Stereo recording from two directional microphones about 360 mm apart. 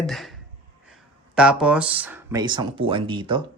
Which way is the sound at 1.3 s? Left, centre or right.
Centre.